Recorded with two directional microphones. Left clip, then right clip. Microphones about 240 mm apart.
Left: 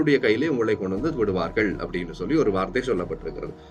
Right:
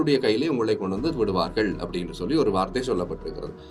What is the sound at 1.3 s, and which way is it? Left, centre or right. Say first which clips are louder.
Speech: even; right.